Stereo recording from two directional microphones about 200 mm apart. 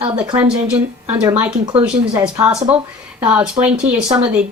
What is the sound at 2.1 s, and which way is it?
Speech, 15° right (ahead or behind).